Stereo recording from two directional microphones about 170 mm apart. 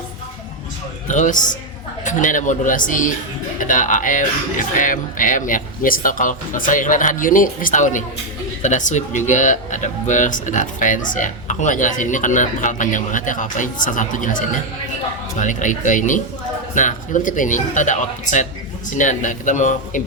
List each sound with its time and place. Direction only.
1.0 s speech: 45° left (ahead or behind)